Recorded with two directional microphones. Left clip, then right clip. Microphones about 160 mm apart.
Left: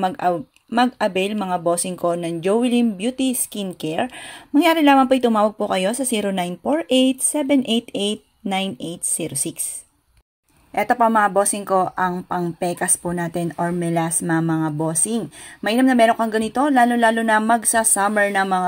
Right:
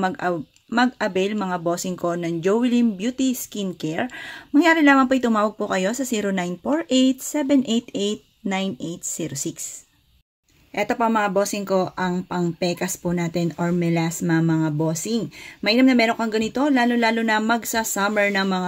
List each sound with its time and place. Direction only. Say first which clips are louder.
0.0 s speech: left 3 dB; 5° right (ahead or behind)
10.7 s speech: left 4 dB; centre (ahead or behind)
11.9 s a woman's voice: left 4 dB; 10° right (ahead or behind)
14.0 s a woman's voice: left 1 dB; 15° right (ahead or behind)
14.9 s speech: left 1 dB; 20° right (ahead or behind)
16.1 s speech: left 4 dB; centre (ahead or behind)
18.2 s a woman's voice: left 2 dB; 15° right (ahead or behind)